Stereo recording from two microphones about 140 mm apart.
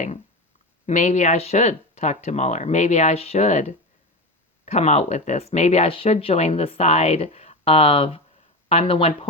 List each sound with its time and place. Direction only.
0.9 s speech: 60° left (ahead or behind); by 9.1 s 45° left (ahead or behind)